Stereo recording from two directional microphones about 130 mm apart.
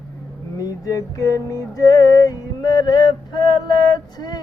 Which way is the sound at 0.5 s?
25° left (ahead or behind).